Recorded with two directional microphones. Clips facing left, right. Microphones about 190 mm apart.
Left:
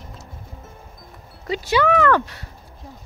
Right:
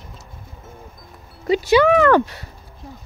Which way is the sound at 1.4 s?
15° right (ahead or behind).